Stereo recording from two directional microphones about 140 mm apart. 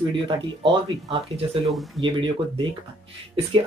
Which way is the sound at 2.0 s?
35° right (ahead or behind).